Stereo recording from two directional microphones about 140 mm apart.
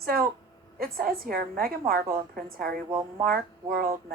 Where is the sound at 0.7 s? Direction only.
90° right.